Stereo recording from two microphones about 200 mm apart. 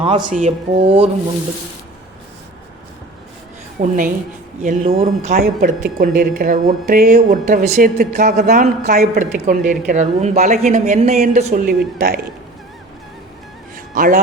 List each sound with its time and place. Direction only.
0.0 s speech: 25° right (ahead or behind)
0.3 s speech: 35° right (ahead or behind)
3.8 s speech: 40° right (ahead or behind)
13.7 s music: 45° right (ahead or behind)